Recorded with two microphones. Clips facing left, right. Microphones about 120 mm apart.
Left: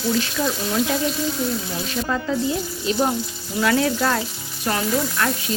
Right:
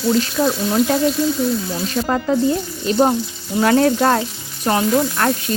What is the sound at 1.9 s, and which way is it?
Speech, 40° right (ahead or behind).